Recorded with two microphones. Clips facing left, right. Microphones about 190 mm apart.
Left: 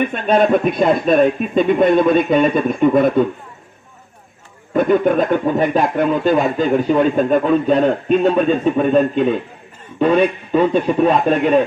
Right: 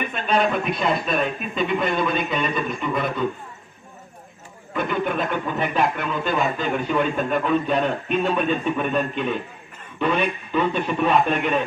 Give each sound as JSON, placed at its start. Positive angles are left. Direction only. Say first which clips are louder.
{"t": 0.1, "sound": "a man's voice", "louder": "left 4 dB", "side_deg": 45}
{"t": 4.7, "sound": "speech", "louder": "left 10 dB", "side_deg": 40}